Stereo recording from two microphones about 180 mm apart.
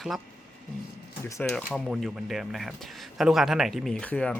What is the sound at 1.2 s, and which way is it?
Speech, 15° left (ahead or behind).